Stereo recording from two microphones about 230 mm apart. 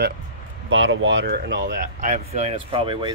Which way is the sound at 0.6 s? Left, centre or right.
Right.